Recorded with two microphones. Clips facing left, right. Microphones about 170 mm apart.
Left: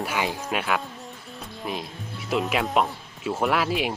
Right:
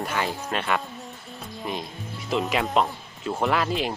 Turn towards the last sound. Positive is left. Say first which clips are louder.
# even
turn(degrees=5)  # may be behind; listen again after turning